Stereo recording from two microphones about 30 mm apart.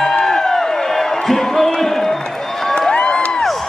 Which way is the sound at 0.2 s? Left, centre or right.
Centre.